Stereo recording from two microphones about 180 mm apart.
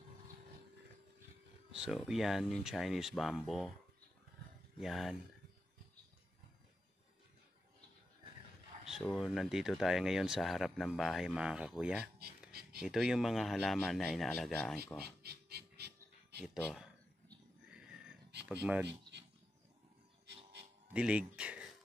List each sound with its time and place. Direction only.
1.7 s speech: 5° right (ahead or behind)
4.7 s speech: centre (ahead or behind)
8.8 s speech: centre (ahead or behind)
12.4 s a sound: 60° right (ahead or behind)
12.8 s speech: centre (ahead or behind)
15.2 s a sound: 60° right (ahead or behind)
18.6 s speech: 10° right (ahead or behind)
20.9 s speech: 5° right (ahead or behind)